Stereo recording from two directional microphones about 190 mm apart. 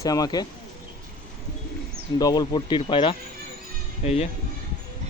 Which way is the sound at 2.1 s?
20° left (ahead or behind).